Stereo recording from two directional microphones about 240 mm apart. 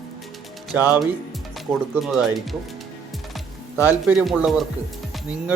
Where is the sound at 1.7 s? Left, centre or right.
Centre.